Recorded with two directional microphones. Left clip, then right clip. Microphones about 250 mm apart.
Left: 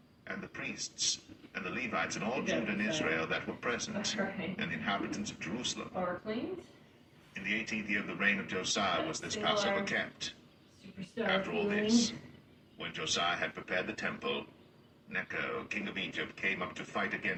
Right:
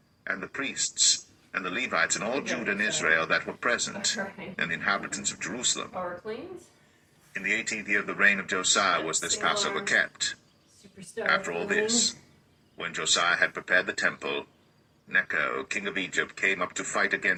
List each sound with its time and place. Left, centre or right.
0.3 s speech: right
7.3 s speech: right
11.3 s speech: right